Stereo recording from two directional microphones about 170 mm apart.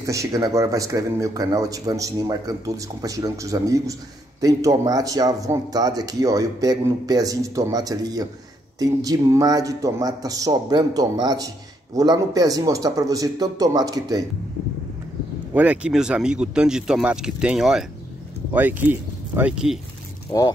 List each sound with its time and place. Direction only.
0.0 s speech: 20° right (ahead or behind)
15.5 s speech: 10° right (ahead or behind)